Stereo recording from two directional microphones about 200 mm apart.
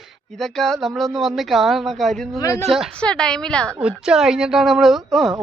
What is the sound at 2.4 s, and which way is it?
Speech, 15° left (ahead or behind).